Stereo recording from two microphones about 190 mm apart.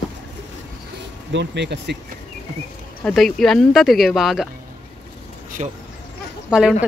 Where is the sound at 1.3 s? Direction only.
65° right (ahead or behind).